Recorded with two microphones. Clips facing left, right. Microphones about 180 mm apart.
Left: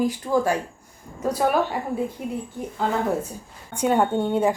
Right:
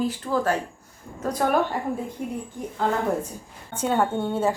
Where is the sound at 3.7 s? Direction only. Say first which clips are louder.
Left 3 dB; 15° left (ahead or behind).